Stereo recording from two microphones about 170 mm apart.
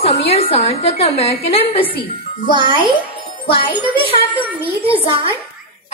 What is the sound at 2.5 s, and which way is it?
Speech, 30° right (ahead or behind).